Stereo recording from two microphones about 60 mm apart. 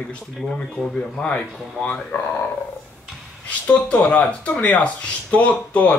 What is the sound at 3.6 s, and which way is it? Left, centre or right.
Speech, left.